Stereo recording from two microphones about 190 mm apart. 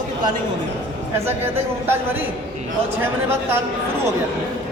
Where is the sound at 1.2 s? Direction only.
10° right (ahead or behind).